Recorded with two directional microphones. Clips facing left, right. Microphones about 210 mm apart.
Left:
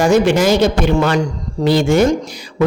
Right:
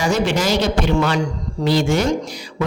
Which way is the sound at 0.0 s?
50° left (ahead or behind).